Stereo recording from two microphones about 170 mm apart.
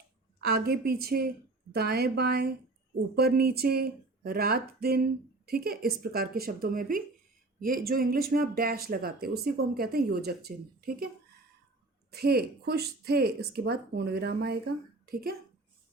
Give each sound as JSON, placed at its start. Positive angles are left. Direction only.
{"t": 0.3, "sound": "speech", "side_deg": -65}
{"t": 12.1, "sound": "speech", "side_deg": -65}